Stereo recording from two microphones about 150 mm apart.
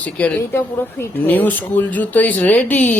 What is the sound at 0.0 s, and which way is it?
A woman's voice, 10° left (ahead or behind).